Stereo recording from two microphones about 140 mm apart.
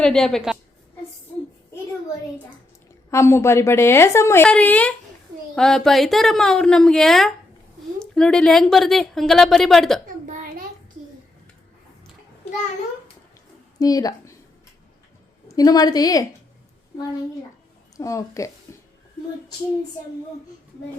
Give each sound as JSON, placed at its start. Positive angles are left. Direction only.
{"t": 0.0, "sound": "speech", "side_deg": 5}
{"t": 3.1, "sound": "a woman's voice", "side_deg": 20}
{"t": 10.2, "sound": "a sound", "side_deg": -75}
{"t": 13.7, "sound": "a woman's voice", "side_deg": 25}
{"t": 15.4, "sound": "a woman's voice", "side_deg": 25}
{"t": 17.9, "sound": "speech", "side_deg": 25}